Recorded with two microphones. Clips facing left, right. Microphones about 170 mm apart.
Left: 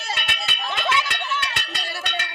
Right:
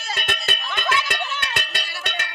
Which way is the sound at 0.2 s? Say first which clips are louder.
Right 3 dB; 45° right (ahead or behind).